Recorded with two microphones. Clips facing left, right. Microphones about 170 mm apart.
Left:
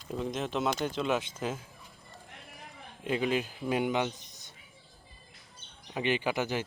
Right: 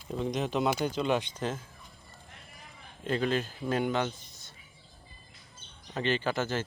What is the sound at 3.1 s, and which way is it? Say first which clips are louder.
A man's voice: even; 10° left (ahead or behind).